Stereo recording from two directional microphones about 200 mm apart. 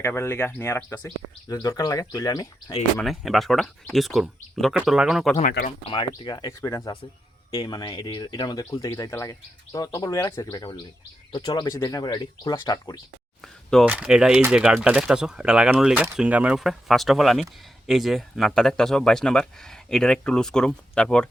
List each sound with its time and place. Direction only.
0.0 s speech: 10° left (ahead or behind)
3.0 s speech: centre (ahead or behind)
5.9 s speech: 20° left (ahead or behind)
13.4 s a sound: centre (ahead or behind)
13.8 s speech: 5° right (ahead or behind)